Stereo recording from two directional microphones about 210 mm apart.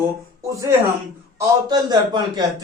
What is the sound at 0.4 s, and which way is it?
A man's voice, 15° right (ahead or behind).